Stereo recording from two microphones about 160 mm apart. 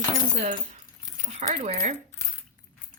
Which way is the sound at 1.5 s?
45° right (ahead or behind).